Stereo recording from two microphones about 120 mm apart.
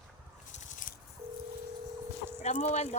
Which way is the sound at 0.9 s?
90° left.